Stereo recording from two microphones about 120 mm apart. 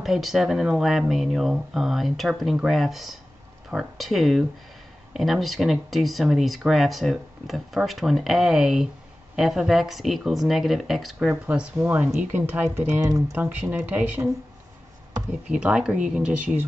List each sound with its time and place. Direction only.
0.0 s speech: centre (ahead or behind)
15.4 s speech: 10° right (ahead or behind)